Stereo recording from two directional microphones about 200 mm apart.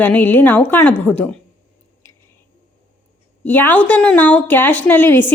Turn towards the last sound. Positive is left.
turn(degrees=10)  # may be behind; listen again after turning